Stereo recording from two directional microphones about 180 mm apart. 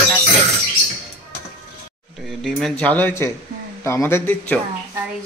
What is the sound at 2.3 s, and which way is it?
A man's voice, centre (ahead or behind).